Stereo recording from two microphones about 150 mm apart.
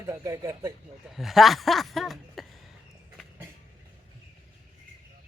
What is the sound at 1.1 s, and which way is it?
Speech, centre (ahead or behind).